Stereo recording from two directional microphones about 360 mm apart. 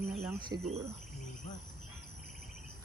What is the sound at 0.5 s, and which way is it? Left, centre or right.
Speech, centre.